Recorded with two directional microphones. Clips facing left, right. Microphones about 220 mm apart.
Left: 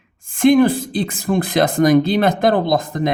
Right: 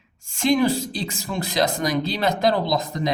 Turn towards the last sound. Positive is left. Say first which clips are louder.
# left 5 dB
turn(degrees=50)  # may be behind; listen again after turning